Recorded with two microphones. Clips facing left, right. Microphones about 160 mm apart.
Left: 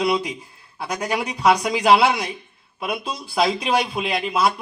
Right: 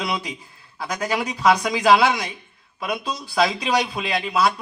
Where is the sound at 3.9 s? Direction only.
20° left (ahead or behind).